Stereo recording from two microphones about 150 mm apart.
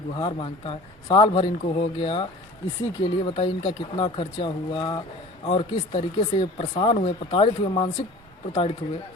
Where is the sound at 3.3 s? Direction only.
35° left (ahead or behind).